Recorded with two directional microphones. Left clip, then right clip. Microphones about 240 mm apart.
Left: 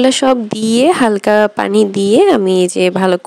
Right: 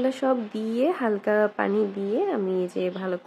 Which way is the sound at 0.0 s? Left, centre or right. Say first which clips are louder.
Left 13 dB; left.